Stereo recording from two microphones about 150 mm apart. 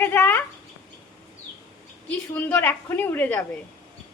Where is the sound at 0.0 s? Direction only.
15° left (ahead or behind).